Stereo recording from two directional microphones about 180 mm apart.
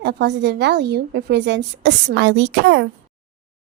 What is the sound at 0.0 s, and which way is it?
A woman's voice, 70° right (ahead or behind).